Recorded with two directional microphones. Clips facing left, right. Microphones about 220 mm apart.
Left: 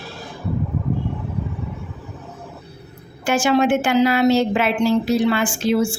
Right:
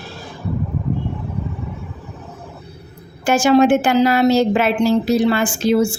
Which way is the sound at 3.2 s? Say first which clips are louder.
Right 4 dB; 40° right (ahead or behind).